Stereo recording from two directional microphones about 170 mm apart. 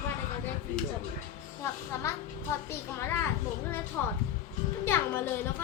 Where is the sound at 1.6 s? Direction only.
15° left (ahead or behind).